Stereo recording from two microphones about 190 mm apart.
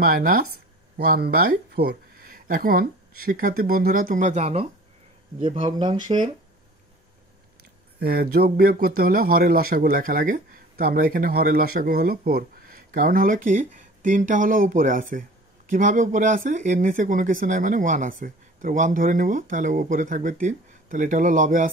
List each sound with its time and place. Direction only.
0.0 s speech: 50° right (ahead or behind); by 6.1 s 25° right (ahead or behind)
8.0 s speech: 55° right (ahead or behind)